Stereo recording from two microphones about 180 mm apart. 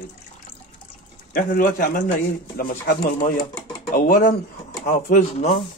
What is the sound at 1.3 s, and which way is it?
Speech, 50° left (ahead or behind).